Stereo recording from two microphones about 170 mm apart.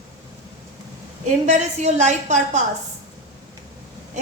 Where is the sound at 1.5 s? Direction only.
45° right (ahead or behind).